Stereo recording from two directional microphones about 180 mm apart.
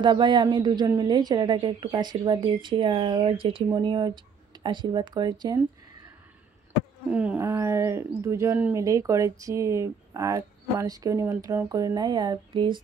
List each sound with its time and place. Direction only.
0.0 s a woman's voice: 25° right (ahead or behind)
7.1 s speech: 5° right (ahead or behind); by 12.8 s 25° right (ahead or behind)